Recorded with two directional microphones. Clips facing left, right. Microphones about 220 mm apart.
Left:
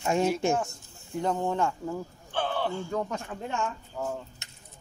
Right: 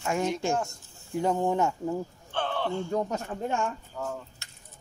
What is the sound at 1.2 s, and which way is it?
Speech, 15° right (ahead or behind).